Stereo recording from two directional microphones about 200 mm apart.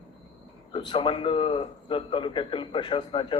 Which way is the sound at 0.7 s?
25° left (ahead or behind).